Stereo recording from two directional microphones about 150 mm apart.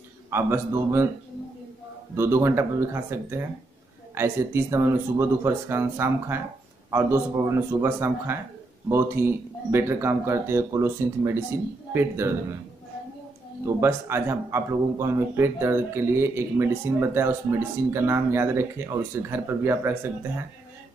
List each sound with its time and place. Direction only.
0.3 s speech: 15° right (ahead or behind)
2.1 s speech: 15° right (ahead or behind)
13.7 s speech: 15° right (ahead or behind)